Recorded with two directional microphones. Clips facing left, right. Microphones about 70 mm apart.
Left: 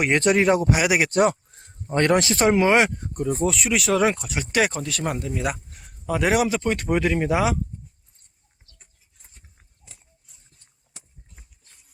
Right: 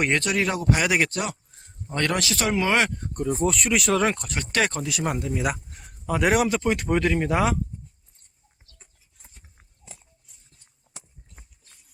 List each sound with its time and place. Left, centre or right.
0.2 s speech: left
0.7 s speech: centre
1.1 s speech: left
1.9 s speech: left
3.0 s speech: centre
4.8 s speech: centre